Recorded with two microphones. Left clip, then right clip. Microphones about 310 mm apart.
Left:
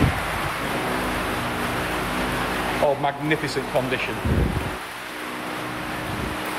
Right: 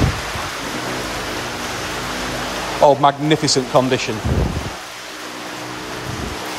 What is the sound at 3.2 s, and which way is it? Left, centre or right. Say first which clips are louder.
Speech: right 7 dB; right.